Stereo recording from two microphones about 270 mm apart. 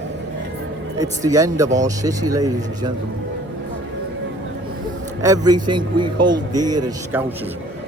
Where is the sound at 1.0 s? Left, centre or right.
Centre.